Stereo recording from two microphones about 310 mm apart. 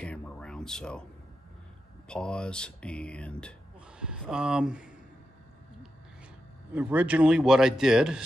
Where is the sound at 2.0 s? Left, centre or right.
Centre.